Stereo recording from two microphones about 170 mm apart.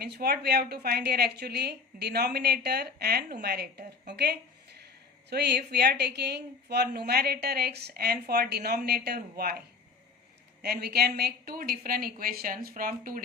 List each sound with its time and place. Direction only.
0.0 s a woman's voice: 65° right (ahead or behind)